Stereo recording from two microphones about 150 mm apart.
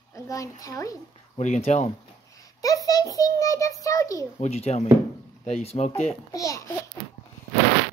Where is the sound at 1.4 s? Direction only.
50° left (ahead or behind).